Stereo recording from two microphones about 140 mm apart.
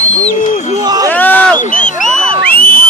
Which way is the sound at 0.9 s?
25° right (ahead or behind).